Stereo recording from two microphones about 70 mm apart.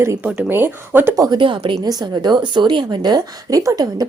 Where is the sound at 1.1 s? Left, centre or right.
Right.